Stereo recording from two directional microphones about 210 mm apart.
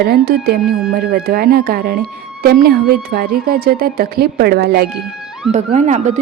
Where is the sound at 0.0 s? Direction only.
50° right (ahead or behind).